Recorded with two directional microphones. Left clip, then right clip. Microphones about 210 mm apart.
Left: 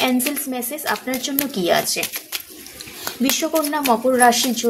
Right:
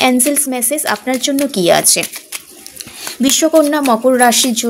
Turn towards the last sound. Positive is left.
turn(degrees=-40)  # may be behind; listen again after turning